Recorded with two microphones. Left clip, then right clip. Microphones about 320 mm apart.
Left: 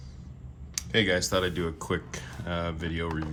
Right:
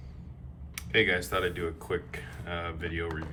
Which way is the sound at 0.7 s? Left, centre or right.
Centre.